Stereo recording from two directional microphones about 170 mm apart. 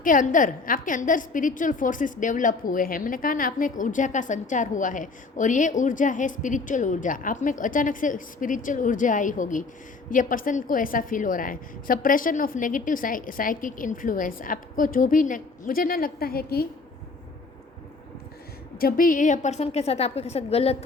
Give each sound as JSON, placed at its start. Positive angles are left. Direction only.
{"t": 0.0, "sound": "a woman's voice", "side_deg": 50}
{"t": 18.8, "sound": "a woman's voice", "side_deg": 55}